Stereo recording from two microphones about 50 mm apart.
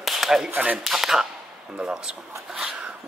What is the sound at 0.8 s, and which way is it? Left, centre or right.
Speech, centre.